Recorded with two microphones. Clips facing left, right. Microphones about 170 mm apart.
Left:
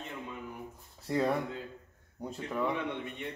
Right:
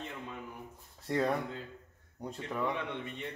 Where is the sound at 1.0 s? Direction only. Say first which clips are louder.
Left 1 dB; 5° left (ahead or behind).